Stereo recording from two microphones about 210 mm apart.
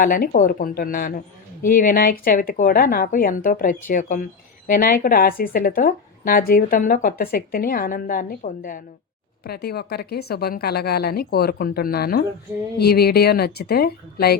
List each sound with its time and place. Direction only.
0.0 s a woman's voice: 40° left (ahead or behind)